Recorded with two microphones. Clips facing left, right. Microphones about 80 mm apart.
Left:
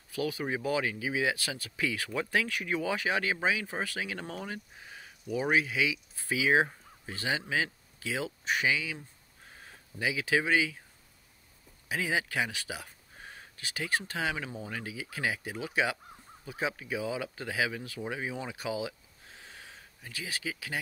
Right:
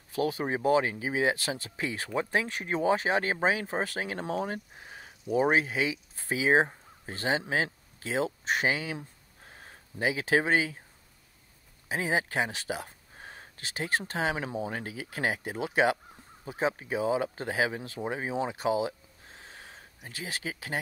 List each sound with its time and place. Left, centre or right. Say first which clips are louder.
0.1 s speech: right 3 dB; right
11.9 s speech: right 2 dB; right